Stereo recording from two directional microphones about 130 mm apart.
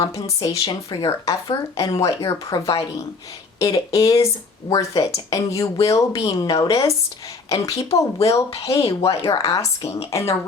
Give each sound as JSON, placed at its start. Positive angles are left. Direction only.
{"t": 0.0, "sound": "speech", "side_deg": 25}